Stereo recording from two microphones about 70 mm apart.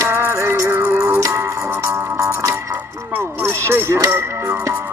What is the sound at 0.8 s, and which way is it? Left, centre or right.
Music, centre.